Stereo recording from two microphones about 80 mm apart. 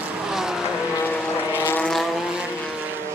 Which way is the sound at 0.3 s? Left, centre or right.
Centre.